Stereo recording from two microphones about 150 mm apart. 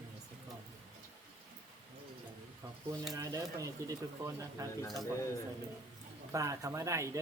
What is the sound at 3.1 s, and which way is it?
Speech, 20° right (ahead or behind).